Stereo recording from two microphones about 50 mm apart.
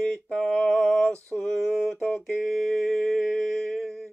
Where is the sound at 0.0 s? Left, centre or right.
Centre.